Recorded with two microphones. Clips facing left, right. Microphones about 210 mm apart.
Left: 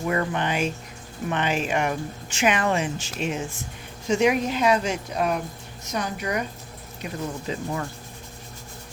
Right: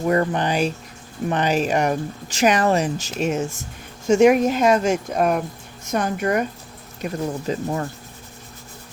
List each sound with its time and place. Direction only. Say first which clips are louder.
0.0 s speech: right 5 dB; 35° right (ahead or behind)